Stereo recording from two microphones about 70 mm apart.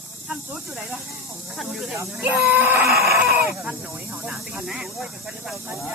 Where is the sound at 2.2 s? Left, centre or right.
Right.